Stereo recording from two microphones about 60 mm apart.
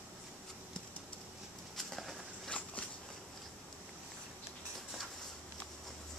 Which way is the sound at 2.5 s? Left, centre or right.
Left.